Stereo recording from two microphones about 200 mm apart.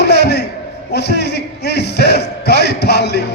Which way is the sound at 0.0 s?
55° left (ahead or behind).